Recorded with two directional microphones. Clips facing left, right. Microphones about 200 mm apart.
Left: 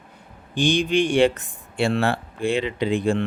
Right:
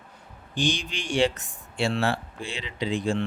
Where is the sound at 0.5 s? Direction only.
55° left (ahead or behind).